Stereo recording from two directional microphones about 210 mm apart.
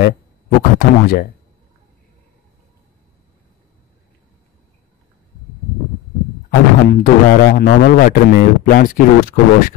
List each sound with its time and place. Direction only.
0.6 s speech: 45° left (ahead or behind)
6.5 s speech: 45° left (ahead or behind)